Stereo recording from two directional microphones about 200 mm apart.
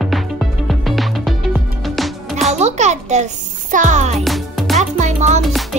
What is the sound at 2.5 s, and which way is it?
Music, 35° right (ahead or behind).